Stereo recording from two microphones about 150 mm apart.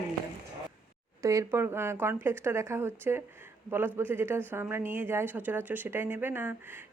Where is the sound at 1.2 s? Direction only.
20° right (ahead or behind).